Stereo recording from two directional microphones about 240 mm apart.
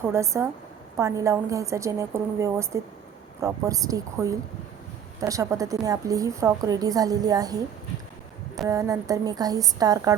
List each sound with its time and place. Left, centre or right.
0.0 s a woman's voice: centre
8.6 s a woman's voice: centre